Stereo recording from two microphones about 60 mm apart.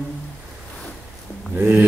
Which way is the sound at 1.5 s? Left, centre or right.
Right.